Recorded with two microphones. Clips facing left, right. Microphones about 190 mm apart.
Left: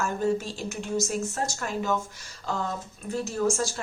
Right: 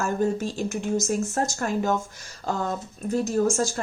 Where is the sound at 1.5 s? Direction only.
45° right (ahead or behind).